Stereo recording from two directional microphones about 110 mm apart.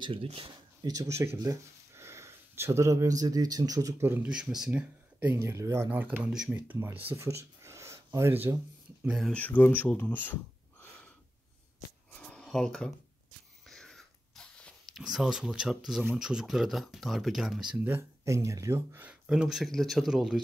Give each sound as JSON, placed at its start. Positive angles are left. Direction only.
{"t": 0.0, "sound": "speech", "side_deg": -55}
{"t": 0.8, "sound": "speech", "side_deg": -30}
{"t": 4.0, "sound": "speech", "side_deg": -20}
{"t": 4.3, "sound": "speech", "side_deg": -5}
{"t": 7.2, "sound": "a sound", "side_deg": -25}
{"t": 9.0, "sound": "speech", "side_deg": -5}
{"t": 9.3, "sound": "speech", "side_deg": 15}
{"t": 12.1, "sound": "a sound", "side_deg": 10}
{"t": 15.0, "sound": "speech", "side_deg": -5}
{"t": 17.8, "sound": "speech", "side_deg": -20}
{"t": 19.2, "sound": "speech", "side_deg": -5}